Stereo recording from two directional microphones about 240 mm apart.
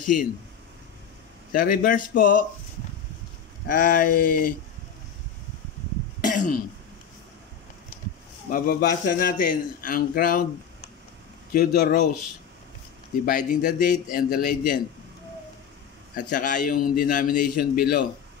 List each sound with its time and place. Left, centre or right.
0.0 s speech: left
1.5 s a man's voice: left
3.6 s a man's voice: left
6.2 s throat clearing: left
8.5 s a man's voice: left
11.5 s a man's voice: left
13.2 s a man's voice: left
16.2 s a man's voice: left